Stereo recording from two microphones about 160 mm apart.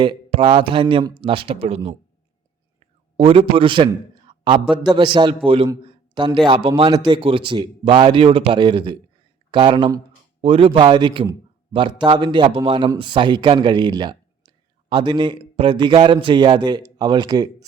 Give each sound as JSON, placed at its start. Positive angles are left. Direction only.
{"t": 0.0, "sound": "speech", "side_deg": -30}
{"t": 3.2, "sound": "speech", "side_deg": -35}
{"t": 4.3, "sound": "a sound", "side_deg": -30}
{"t": 4.7, "sound": "a man's voice", "side_deg": -30}
{"t": 6.4, "sound": "a man's voice", "side_deg": -35}